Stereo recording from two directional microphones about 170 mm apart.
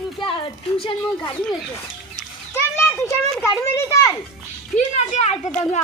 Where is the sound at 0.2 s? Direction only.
30° left (ahead or behind).